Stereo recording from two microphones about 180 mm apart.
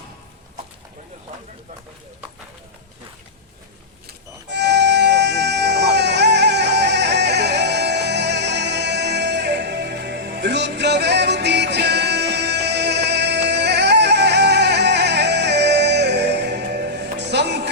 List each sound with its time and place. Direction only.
4.4 s music: 70° right (ahead or behind)